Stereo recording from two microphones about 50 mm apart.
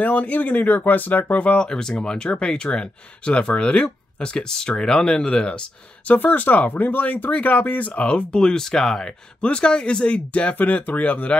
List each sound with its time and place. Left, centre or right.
0.0 s speech: left
1.6 s speech: centre
6.0 s speech: left; by 9.1 s centre
9.4 s speech: centre